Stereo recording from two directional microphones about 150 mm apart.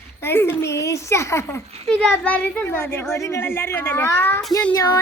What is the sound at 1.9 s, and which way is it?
Speech, 5° left (ahead or behind).